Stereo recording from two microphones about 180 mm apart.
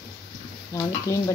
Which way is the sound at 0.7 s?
15° left (ahead or behind).